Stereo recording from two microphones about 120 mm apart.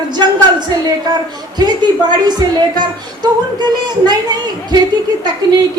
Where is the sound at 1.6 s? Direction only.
35° right (ahead or behind).